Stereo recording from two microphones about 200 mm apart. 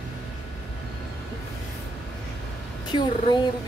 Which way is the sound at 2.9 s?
20° left (ahead or behind).